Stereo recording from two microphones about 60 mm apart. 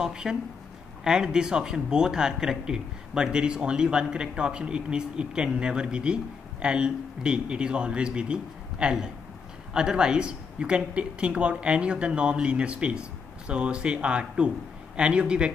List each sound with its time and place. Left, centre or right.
0.0 s speech: centre